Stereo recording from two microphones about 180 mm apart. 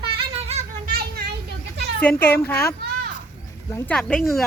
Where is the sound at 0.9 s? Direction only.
60° right (ahead or behind).